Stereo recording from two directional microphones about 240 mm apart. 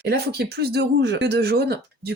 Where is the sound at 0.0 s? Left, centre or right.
Right.